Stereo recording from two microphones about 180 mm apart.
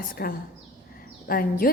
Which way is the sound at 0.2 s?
60° left (ahead or behind).